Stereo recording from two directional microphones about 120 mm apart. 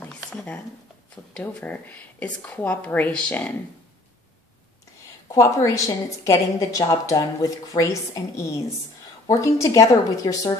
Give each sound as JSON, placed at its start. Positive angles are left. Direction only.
{"t": 0.0, "sound": "a sound", "side_deg": 10}
{"t": 1.1, "sound": "speech", "side_deg": 10}
{"t": 5.3, "sound": "a woman's voice", "side_deg": 25}